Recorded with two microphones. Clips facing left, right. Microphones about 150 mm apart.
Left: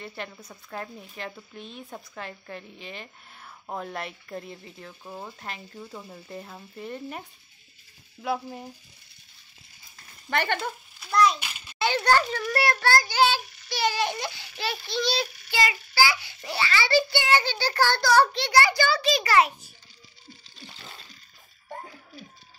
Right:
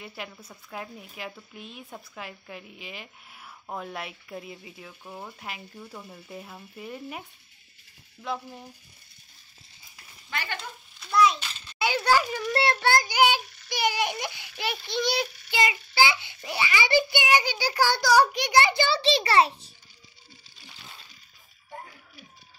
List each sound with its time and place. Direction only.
0.0 s speech: 5° right (ahead or behind)
5.0 s speech: 5° left (ahead or behind)
5.4 s a child's voice: 5° right (ahead or behind)
8.2 s a sound: 10° left (ahead or behind)
10.3 s frying: 60° left (ahead or behind)
11.0 s a child's voice: centre (ahead or behind)
11.3 s a sound: 10° left (ahead or behind)
11.8 s a child's voice: 5° right (ahead or behind); by 19.5 s 30° right (ahead or behind)